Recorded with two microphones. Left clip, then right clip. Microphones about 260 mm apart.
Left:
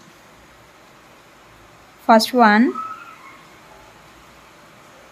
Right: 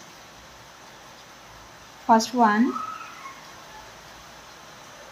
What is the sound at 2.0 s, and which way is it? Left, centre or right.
Speech, left.